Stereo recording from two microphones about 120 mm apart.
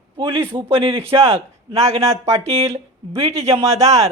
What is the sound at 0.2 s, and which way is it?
A man's voice, 45° right (ahead or behind).